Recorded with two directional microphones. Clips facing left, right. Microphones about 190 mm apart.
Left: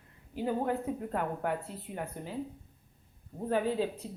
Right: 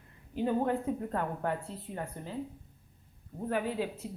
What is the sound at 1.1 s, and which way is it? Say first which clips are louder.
Speech: even; 15° left (ahead or behind).